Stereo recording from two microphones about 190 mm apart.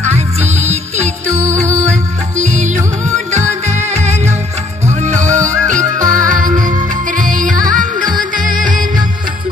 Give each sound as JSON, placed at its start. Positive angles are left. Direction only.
{"t": 0.0, "sound": "music", "side_deg": -35}
{"t": 4.8, "sound": "music", "side_deg": -40}
{"t": 5.4, "sound": "music", "side_deg": -15}
{"t": 5.9, "sound": "music", "side_deg": -45}